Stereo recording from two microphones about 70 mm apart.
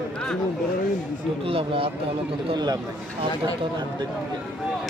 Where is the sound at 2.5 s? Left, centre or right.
Right.